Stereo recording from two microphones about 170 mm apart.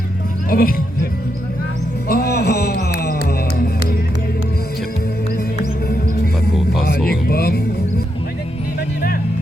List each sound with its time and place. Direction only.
0.5 s speech: 60° left (ahead or behind)
2.0 s music: 65° left (ahead or behind)
6.8 s music: 60° left (ahead or behind)